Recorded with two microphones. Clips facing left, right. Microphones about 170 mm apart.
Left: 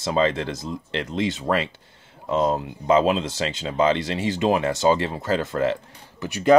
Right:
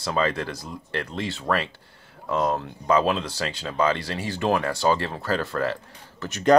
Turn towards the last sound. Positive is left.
turn(degrees=10)  # may be behind; listen again after turning